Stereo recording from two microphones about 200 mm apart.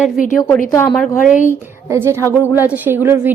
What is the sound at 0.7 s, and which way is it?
Speech, 15° left (ahead or behind).